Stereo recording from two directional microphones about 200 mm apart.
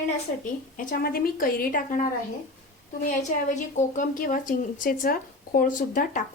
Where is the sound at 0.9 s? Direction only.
45° left (ahead or behind).